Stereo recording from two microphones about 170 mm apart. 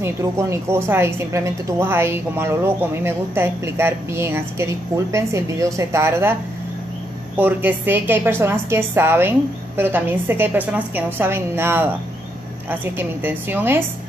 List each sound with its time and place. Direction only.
0.0 s a woman's voice: 15° right (ahead or behind)
7.3 s a woman's voice: 10° right (ahead or behind)